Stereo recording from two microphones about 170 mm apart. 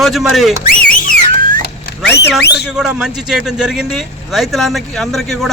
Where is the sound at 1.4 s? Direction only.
55° right (ahead or behind).